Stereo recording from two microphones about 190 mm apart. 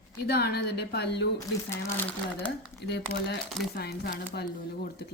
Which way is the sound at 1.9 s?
10° left (ahead or behind).